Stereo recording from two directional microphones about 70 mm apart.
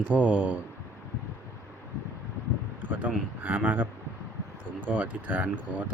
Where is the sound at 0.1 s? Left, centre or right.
Right.